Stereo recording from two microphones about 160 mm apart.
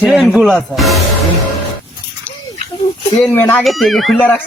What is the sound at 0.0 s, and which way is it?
Music, centre (ahead or behind).